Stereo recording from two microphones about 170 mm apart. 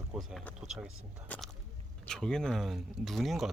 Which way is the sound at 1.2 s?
10° left (ahead or behind).